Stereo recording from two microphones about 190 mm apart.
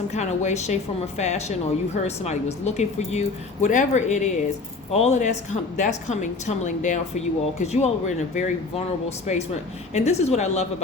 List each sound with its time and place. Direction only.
0.1 s a woman's voice: 35° left (ahead or behind)